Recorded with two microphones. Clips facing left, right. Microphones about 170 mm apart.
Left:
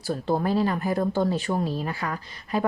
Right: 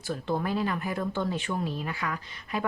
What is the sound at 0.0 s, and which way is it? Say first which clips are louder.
Speech: left 5 dB; 35° left (ahead or behind).